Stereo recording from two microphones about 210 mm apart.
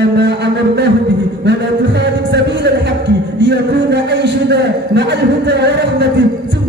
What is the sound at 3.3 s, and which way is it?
A man's voice, 55° right (ahead or behind).